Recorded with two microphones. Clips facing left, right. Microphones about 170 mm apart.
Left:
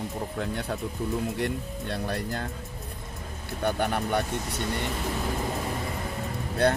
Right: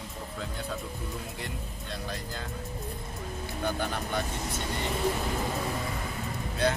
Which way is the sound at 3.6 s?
60° left (ahead or behind).